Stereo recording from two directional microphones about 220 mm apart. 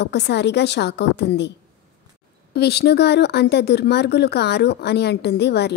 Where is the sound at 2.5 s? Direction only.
50° left (ahead or behind).